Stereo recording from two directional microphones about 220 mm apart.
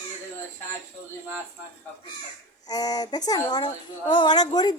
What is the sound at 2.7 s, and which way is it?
A woman's voice, 15° left (ahead or behind).